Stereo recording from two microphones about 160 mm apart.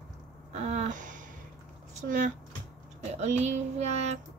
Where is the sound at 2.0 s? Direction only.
55° right (ahead or behind).